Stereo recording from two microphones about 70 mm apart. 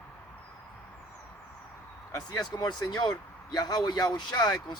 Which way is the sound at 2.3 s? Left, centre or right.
Left.